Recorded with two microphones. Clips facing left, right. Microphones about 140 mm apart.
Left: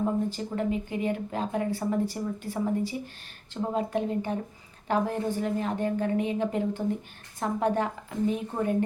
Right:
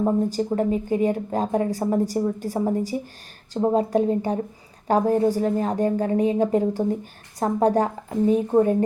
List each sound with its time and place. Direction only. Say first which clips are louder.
0.0 s speech: right 6 dB; 40° right (ahead or behind)